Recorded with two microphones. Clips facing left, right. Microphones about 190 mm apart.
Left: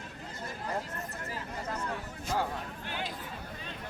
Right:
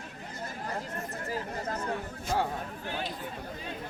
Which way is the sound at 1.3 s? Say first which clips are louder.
Right 5 dB; 40° right (ahead or behind).